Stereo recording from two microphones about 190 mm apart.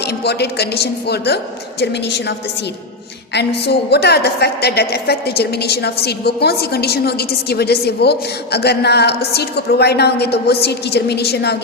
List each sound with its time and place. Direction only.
0.3 s a woman's voice: 60° left (ahead or behind)
3.3 s a woman's voice: 60° left (ahead or behind)